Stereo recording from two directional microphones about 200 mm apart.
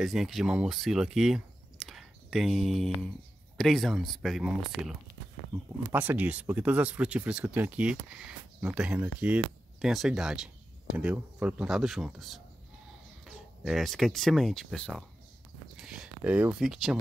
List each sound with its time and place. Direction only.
0.0 s speech: centre (ahead or behind)